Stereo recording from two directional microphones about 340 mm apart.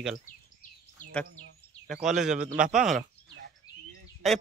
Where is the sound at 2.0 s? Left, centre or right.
Centre.